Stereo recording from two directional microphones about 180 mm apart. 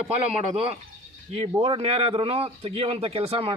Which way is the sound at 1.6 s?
30° right (ahead or behind).